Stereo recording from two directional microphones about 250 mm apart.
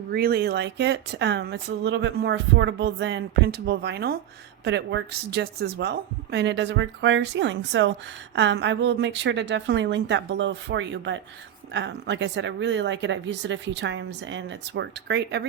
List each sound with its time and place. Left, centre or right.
0.1 s speech: right